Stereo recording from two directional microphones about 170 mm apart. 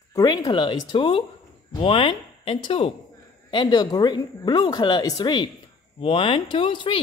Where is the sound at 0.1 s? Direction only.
20° left (ahead or behind).